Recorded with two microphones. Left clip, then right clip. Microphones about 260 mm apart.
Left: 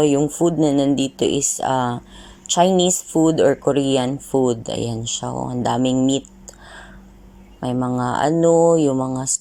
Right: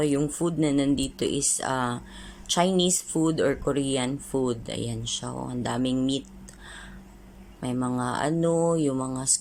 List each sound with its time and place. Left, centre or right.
0.0 s speech: centre
7.6 s speech: centre